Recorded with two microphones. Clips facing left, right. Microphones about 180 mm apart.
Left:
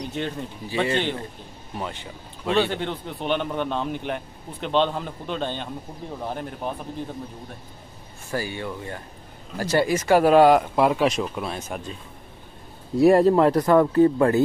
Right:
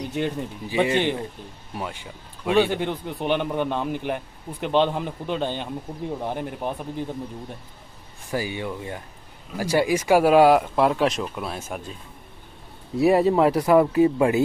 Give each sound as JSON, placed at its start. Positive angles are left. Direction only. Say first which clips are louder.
{"t": 0.0, "sound": "a man's voice", "louder": "right 3 dB", "side_deg": -10}
{"t": 8.3, "sound": "a man's voice", "louder": "right 1 dB", "side_deg": -15}
{"t": 12.9, "sound": "a man's voice", "louder": "left 2 dB", "side_deg": 0}